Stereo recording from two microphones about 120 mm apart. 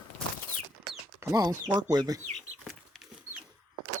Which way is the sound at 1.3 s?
30° right (ahead or behind).